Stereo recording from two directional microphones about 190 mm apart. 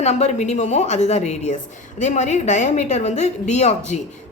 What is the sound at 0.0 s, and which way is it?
A woman's voice, 35° left (ahead or behind).